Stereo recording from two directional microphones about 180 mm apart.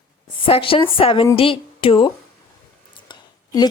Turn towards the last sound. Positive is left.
turn(degrees=25)  # may be behind; listen again after turning